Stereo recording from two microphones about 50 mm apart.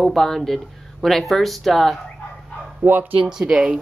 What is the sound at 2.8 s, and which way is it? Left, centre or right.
Speech, right.